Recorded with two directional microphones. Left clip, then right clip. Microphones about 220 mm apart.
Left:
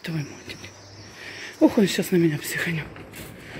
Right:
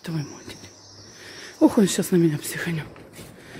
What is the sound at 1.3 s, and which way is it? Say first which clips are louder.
Speech: even; 15° right (ahead or behind).